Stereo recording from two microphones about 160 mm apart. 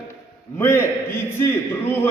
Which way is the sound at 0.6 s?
15° left (ahead or behind).